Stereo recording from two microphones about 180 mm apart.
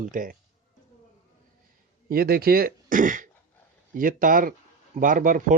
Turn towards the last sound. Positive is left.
turn(degrees=-50)  # may be behind; listen again after turning